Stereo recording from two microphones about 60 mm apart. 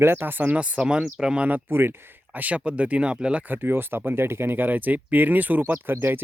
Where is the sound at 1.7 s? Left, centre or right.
Right.